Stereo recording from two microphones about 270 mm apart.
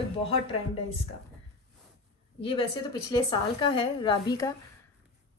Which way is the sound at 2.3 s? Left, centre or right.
Centre.